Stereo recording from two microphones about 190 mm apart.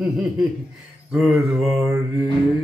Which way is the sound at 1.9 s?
15° right (ahead or behind).